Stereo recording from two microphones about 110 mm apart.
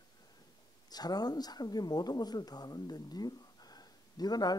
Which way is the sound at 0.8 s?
35° left (ahead or behind).